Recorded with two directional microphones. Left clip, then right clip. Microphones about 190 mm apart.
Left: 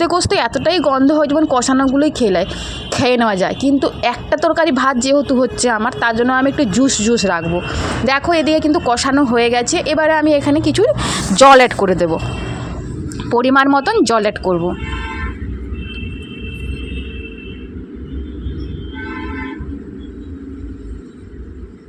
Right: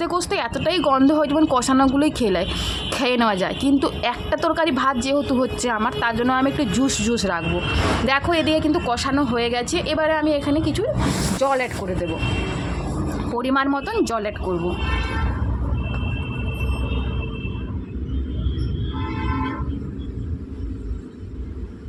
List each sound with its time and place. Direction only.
0.0 s a woman's voice: 25° left (ahead or behind); by 11.9 s 45° left (ahead or behind)
13.3 s a woman's voice: 35° left (ahead or behind)